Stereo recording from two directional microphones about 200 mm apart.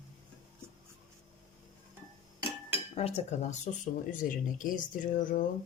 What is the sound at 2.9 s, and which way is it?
Speech, 30° left (ahead or behind).